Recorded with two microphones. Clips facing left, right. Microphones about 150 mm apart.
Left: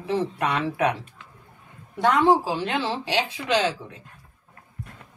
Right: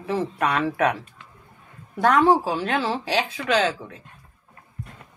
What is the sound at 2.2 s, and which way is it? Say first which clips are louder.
Speech: right 1 dB; 25° left (ahead or behind).